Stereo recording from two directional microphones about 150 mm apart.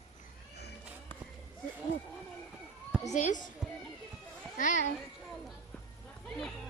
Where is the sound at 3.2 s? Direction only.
55° left (ahead or behind).